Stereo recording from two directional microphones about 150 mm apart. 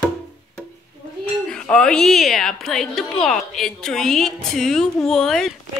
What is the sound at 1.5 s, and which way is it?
Speech, 5° left (ahead or behind).